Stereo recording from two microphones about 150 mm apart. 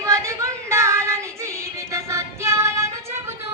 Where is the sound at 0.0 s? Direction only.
20° right (ahead or behind).